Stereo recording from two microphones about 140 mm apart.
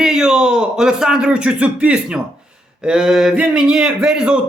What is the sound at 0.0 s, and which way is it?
A man's voice, 5° right (ahead or behind).